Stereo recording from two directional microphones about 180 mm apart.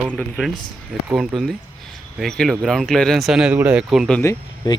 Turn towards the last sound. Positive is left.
turn(degrees=15)  # may be behind; listen again after turning